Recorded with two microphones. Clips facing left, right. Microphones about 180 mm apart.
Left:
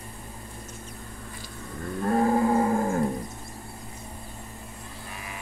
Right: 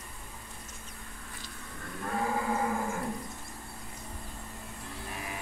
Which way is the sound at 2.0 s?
40° left (ahead or behind).